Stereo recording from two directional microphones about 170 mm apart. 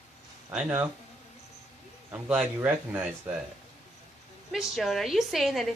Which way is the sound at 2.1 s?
5° right (ahead or behind).